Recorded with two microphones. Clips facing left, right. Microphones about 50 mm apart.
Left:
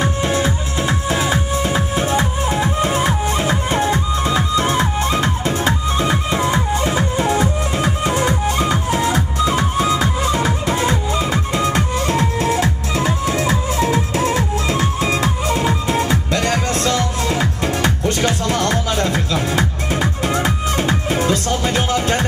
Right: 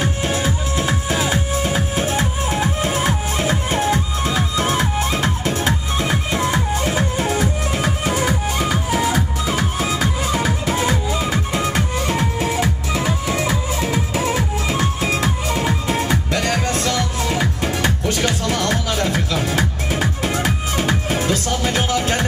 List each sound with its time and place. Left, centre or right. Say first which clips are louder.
0.5 s music: left 1 dB; centre
2.0 s music: left 2 dB; centre
4.6 s music: left 2 dB; centre
8.9 s music: left 1 dB; centre
13.0 s music: left 3 dB; left
13.9 s music: left 2 dB; centre
18.2 s music: left 2 dB; left
21.2 s music: left 2 dB; left